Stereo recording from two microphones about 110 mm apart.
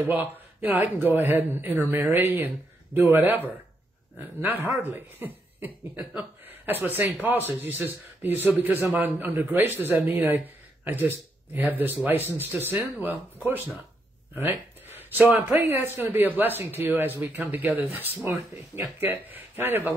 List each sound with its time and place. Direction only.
0.1 s speech: 15° right (ahead or behind)